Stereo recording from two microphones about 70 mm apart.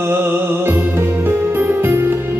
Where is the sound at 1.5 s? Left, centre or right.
Right.